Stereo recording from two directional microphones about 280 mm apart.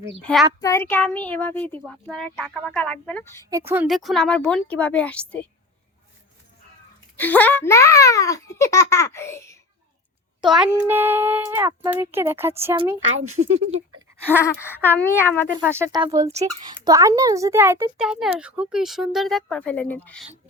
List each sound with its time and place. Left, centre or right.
0.2 s a child's voice: centre
3.5 s a child's voice: centre
7.2 s a child's voice: centre
10.5 s speech: centre
13.0 s a woman's voice: right
13.4 s speech: right
14.3 s a child's voice: centre
15.5 s a child's voice: centre